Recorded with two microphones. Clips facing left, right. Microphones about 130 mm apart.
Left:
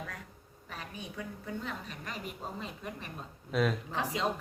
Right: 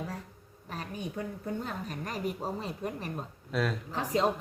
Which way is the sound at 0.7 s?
40° right (ahead or behind).